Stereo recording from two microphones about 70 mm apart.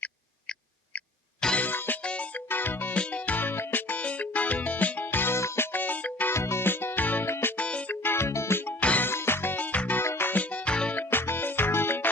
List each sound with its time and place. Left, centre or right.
1.5 s music: left
6.3 s music: left; by 7.9 s centre
8.0 s music: left
8.8 s music: centre
9.0 s music: left
10.0 s music: left; by 11.0 s centre
11.1 s music: left